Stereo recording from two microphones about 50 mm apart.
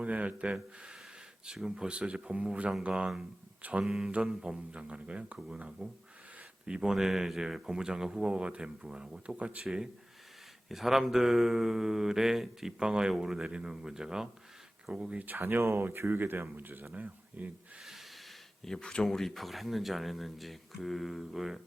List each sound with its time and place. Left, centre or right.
0.0 s speech: right; by 1.9 s centre
1.9 s speech: right
3.8 s speech: centre
9.2 s speech: right
9.6 s speech: centre
15.1 s speech: right
17.8 s snort: centre
18.6 s speech: centre